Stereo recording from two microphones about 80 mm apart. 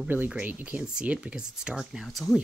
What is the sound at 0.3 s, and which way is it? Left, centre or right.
Speech, centre.